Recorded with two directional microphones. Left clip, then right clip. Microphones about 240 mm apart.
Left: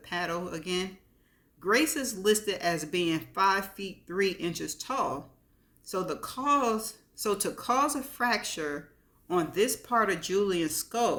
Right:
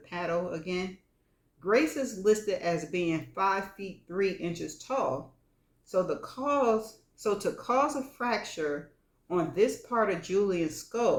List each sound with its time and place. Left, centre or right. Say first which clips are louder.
0.0 s speech: right 1 dB; left